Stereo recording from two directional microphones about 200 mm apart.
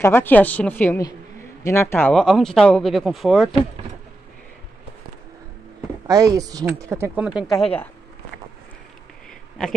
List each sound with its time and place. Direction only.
0.0 s a woman's voice: 10° left (ahead or behind)
6.0 s speech: 15° right (ahead or behind); by 7.6 s centre (ahead or behind)